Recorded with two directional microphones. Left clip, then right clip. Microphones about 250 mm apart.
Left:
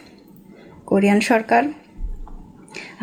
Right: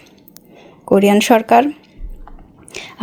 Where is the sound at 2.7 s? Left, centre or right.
Right.